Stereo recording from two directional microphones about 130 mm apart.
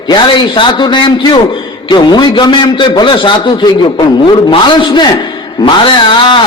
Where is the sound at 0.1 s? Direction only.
35° left (ahead or behind).